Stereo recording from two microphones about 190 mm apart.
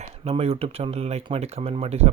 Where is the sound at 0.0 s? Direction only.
30° right (ahead or behind).